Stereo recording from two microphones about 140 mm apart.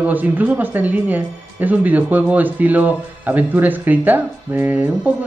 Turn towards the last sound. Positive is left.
turn(degrees=-10)  # may be behind; listen again after turning